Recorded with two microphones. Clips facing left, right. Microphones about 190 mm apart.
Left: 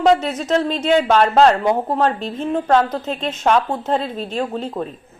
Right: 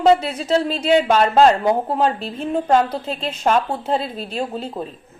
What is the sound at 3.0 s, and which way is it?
Speech, 30° right (ahead or behind).